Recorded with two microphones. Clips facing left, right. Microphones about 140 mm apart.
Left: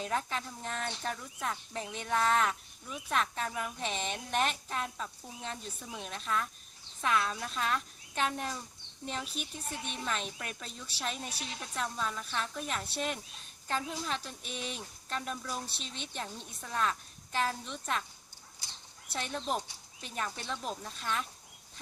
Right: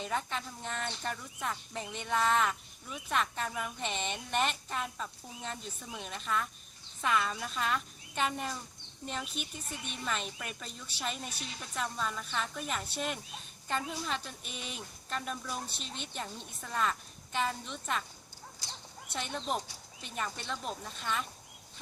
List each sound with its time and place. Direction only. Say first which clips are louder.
0.0 s speech: left 1 dB; centre (ahead or behind)
19.1 s speech: left 1 dB; centre (ahead or behind)